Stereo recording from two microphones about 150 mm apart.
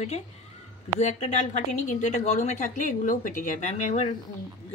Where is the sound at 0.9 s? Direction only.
50° left (ahead or behind).